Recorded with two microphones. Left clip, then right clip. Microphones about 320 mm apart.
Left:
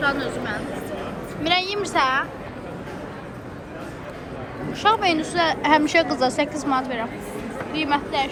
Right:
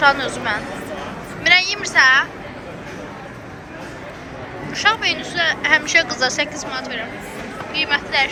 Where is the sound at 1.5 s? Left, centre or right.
Centre.